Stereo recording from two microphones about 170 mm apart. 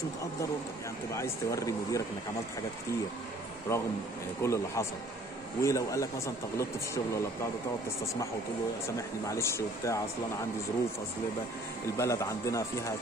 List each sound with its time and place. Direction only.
1.1 s speech: 20° left (ahead or behind)
3.7 s speech: 15° left (ahead or behind)
8.8 s speech: 15° left (ahead or behind)
12.0 s speech: 15° left (ahead or behind)